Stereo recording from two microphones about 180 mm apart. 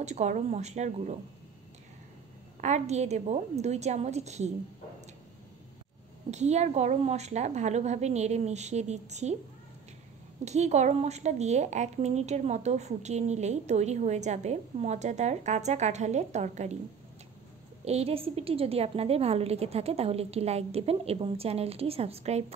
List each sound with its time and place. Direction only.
0.0 s speech: 40° right (ahead or behind)
2.6 s speech: 40° right (ahead or behind)
6.3 s speech: 40° right (ahead or behind)
10.4 s speech: 40° right (ahead or behind)
17.8 s speech: 35° right (ahead or behind)